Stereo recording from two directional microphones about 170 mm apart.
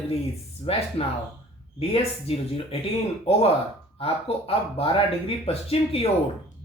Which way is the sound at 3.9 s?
35° left (ahead or behind).